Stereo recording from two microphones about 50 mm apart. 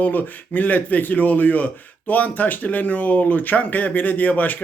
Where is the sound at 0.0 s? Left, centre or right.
Left.